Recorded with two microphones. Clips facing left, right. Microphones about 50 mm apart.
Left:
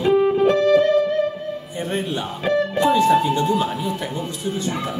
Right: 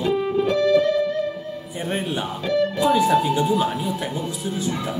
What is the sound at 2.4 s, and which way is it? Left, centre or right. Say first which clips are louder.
Speech: left 2 dB; left.